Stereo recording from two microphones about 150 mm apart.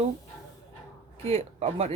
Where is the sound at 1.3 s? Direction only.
45° right (ahead or behind).